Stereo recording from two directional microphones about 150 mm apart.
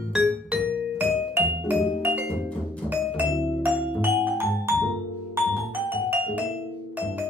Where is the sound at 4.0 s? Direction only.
15° right (ahead or behind).